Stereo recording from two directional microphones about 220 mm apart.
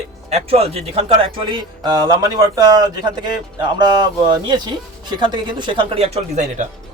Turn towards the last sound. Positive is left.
turn(degrees=-30)  # may be behind; listen again after turning